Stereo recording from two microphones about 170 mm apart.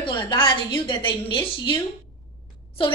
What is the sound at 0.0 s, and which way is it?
A woman's voice, 30° left (ahead or behind).